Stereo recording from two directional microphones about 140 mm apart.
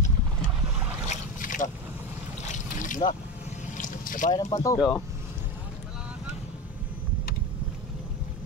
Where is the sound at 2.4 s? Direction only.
65° left (ahead or behind).